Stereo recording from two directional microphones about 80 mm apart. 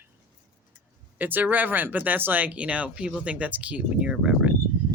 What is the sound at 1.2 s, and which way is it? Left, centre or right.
Speech, right.